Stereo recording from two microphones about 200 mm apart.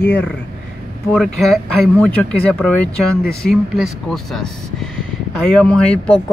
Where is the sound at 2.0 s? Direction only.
5° left (ahead or behind).